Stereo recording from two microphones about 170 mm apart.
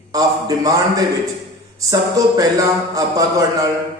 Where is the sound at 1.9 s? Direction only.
20° right (ahead or behind).